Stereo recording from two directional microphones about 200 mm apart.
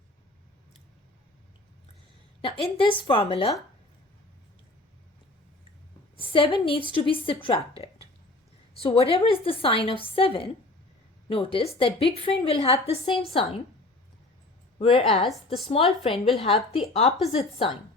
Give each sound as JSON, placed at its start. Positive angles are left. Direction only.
{"t": 2.4, "sound": "a woman's voice", "side_deg": 25}
{"t": 6.1, "sound": "a woman's voice", "side_deg": 25}
{"t": 8.8, "sound": "a woman's voice", "side_deg": 30}
{"t": 14.8, "sound": "a woman's voice", "side_deg": 30}
{"t": 16.1, "sound": "a woman's voice", "side_deg": 0}
{"t": 16.4, "sound": "speech", "side_deg": 30}